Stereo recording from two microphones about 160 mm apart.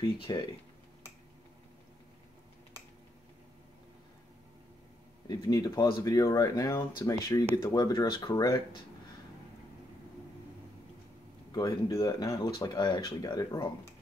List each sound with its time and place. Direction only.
0.3 s speech: 25° left (ahead or behind)
5.3 s speech: 25° left (ahead or behind)
11.5 s speech: 25° left (ahead or behind)